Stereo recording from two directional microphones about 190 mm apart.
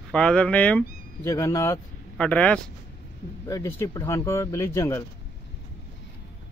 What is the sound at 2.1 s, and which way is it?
Speech, 5° left (ahead or behind).